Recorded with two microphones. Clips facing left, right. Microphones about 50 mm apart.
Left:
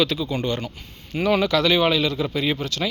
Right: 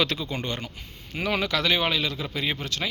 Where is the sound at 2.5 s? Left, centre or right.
Right.